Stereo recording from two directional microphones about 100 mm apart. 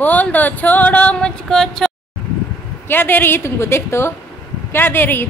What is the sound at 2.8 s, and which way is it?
A woman's voice, 20° left (ahead or behind).